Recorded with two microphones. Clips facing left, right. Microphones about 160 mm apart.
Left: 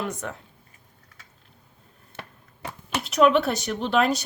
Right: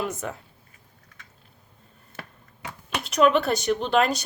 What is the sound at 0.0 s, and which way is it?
Speech, 5° right (ahead or behind).